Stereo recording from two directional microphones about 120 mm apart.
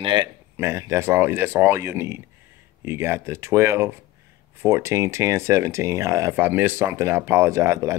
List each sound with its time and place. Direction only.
0.0 s speech: 40° right (ahead or behind)
0.6 s speech: 20° right (ahead or behind)